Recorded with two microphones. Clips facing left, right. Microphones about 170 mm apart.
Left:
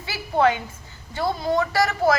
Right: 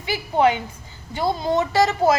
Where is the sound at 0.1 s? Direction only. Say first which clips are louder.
Right 2 dB; 15° right (ahead or behind).